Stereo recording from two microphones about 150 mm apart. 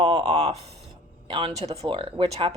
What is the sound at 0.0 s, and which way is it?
Speech, 35° right (ahead or behind).